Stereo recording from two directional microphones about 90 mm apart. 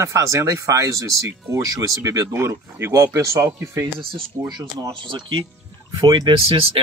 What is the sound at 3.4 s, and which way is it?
Speech, 25° right (ahead or behind).